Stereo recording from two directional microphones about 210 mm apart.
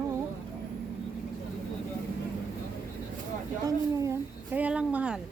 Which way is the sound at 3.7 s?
15° right (ahead or behind).